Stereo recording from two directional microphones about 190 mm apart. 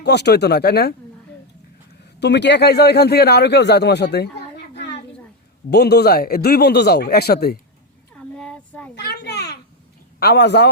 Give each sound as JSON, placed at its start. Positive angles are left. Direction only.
{"t": 0.0, "sound": "a man's voice", "side_deg": 60}
{"t": 2.2, "sound": "a man's voice", "side_deg": 65}
{"t": 4.7, "sound": "a sound", "side_deg": 60}
{"t": 5.7, "sound": "a man's voice", "side_deg": 60}
{"t": 8.1, "sound": "child singing", "side_deg": 5}
{"t": 9.0, "sound": "a sound", "side_deg": 65}
{"t": 10.2, "sound": "a man's voice", "side_deg": 60}